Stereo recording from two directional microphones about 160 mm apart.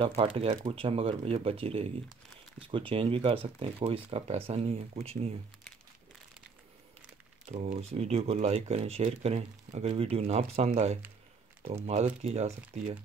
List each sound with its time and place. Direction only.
0.0 s speech: 35° right (ahead or behind)
7.4 s speech: 55° right (ahead or behind)